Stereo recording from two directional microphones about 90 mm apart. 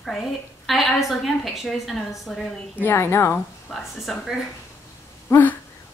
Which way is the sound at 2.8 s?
25° left (ahead or behind).